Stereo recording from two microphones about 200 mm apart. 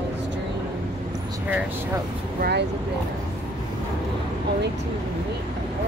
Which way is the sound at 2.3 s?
55° right (ahead or behind).